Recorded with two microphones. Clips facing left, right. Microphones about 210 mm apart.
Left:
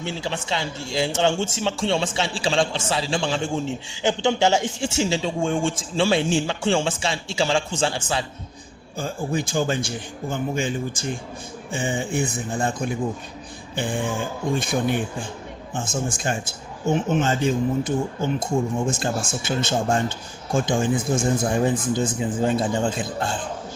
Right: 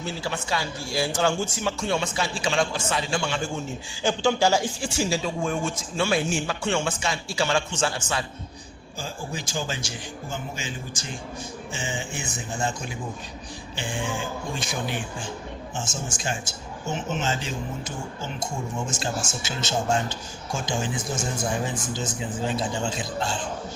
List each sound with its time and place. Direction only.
0.0 s a man's voice: 25° left (ahead or behind)
9.0 s speech: 55° left (ahead or behind)